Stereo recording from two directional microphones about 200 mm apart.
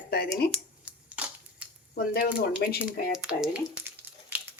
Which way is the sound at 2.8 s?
5° right (ahead or behind).